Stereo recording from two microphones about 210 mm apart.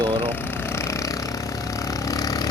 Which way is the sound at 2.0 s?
15° left (ahead or behind).